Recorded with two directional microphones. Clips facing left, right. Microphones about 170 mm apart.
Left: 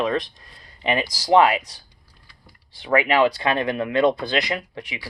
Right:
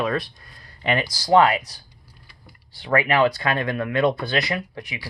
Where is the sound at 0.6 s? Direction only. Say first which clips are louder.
Even; 20° left (ahead or behind).